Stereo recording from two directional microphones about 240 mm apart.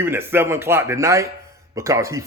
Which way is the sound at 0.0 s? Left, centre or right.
Centre.